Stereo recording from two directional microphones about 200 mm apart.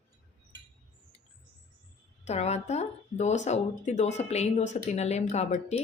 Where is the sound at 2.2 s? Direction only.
35° left (ahead or behind).